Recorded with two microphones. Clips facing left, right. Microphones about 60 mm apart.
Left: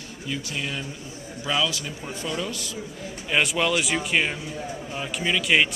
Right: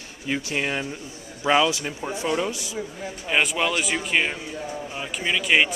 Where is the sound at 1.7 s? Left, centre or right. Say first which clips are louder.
Right 4 dB; right.